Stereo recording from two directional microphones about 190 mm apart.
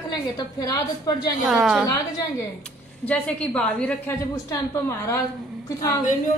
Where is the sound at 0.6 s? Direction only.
20° left (ahead or behind).